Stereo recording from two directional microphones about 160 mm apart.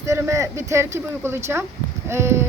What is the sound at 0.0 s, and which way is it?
Speech, 20° right (ahead or behind).